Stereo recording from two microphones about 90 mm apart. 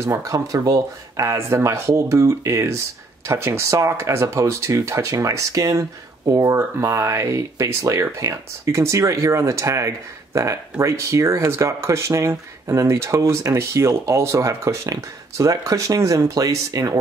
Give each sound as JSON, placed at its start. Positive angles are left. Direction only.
{"t": 0.0, "sound": "speech", "side_deg": -35}